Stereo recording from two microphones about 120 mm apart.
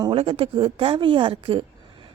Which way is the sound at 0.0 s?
45° right (ahead or behind).